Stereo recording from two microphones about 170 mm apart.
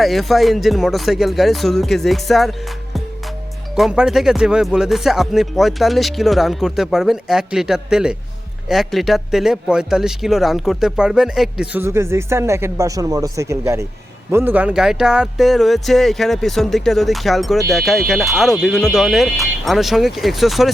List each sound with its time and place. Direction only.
0.0 s speech: centre (ahead or behind)
11.8 s speech: 15° right (ahead or behind); by 20.7 s centre (ahead or behind)